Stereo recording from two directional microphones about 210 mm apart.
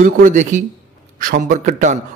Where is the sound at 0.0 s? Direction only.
40° right (ahead or behind).